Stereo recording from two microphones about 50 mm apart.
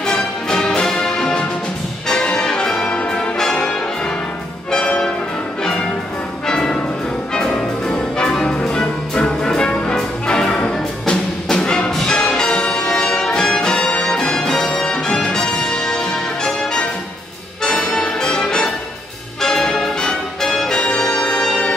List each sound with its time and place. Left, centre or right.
0.0 s music: centre
2.9 s brass instrument: centre
6.4 s music: centre